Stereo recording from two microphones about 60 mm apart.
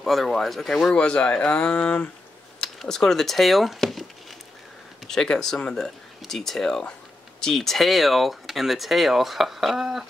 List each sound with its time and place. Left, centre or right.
0.0 s speech: centre
5.0 s speech: centre